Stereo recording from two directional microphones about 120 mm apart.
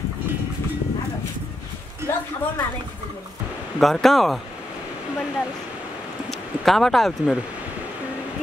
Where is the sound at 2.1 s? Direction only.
20° left (ahead or behind).